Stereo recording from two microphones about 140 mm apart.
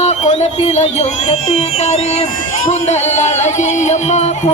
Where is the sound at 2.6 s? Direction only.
60° left (ahead or behind).